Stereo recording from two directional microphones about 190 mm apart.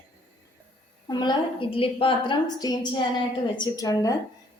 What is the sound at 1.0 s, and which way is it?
A woman's voice, 25° left (ahead or behind).